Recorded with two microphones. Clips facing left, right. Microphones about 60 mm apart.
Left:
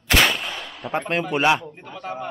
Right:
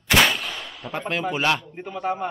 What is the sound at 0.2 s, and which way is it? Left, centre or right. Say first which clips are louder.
Gunshot: even; centre.